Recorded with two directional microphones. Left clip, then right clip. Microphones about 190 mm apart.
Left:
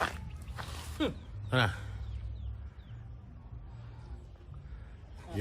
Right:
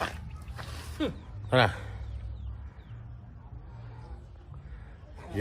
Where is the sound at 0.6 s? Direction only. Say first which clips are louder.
Right 1 dB; 55° left (ahead or behind).